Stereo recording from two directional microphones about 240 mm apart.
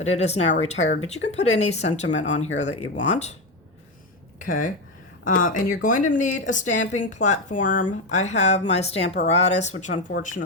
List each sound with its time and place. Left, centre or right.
0.1 s speech: left
4.4 s speech: left